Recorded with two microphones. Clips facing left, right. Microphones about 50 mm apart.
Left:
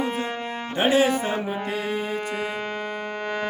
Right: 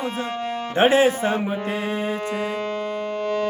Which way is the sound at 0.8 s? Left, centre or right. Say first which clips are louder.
Right 3 dB; right.